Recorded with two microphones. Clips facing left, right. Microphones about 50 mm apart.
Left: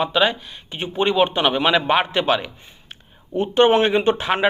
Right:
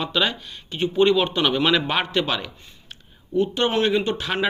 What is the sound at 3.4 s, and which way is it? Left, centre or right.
A man's voice, left.